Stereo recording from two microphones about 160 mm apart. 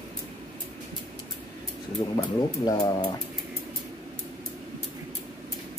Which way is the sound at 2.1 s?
25° left (ahead or behind).